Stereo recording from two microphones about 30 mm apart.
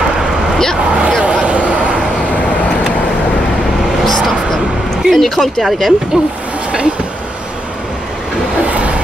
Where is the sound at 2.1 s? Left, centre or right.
Left.